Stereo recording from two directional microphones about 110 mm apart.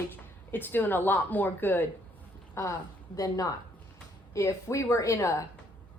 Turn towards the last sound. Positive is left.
turn(degrees=30)  # may be behind; listen again after turning